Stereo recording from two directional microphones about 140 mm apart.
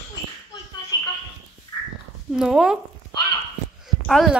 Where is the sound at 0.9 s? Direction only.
30° left (ahead or behind).